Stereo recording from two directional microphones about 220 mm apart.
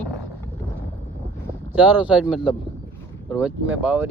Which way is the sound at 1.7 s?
5° right (ahead or behind).